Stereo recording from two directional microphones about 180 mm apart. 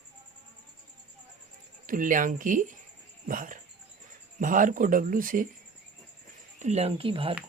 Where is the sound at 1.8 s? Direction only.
50° right (ahead or behind).